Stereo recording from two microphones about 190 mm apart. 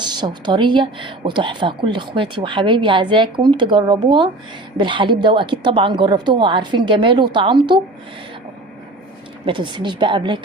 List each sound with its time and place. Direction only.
0.0 s speech: 25° right (ahead or behind)
9.5 s speech: 25° right (ahead or behind)